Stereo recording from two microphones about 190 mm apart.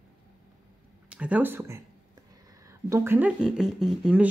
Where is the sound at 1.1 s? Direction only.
5° right (ahead or behind).